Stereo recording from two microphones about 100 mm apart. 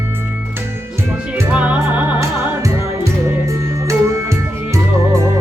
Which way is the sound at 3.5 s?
30° right (ahead or behind).